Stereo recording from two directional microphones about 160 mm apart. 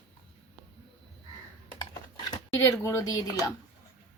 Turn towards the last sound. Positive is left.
turn(degrees=20)  # may be behind; listen again after turning